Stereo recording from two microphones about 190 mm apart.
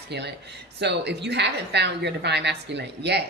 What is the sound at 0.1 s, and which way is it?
A woman's voice, 60° right (ahead or behind).